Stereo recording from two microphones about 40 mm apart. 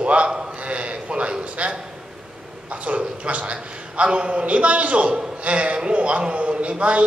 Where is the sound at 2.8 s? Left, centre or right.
Right.